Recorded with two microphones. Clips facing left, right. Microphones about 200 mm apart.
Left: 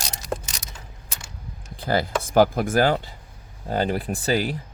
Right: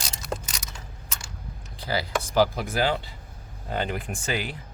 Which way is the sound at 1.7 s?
50° left (ahead or behind).